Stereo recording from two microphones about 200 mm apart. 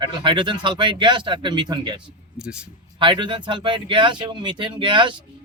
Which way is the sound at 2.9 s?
25° right (ahead or behind).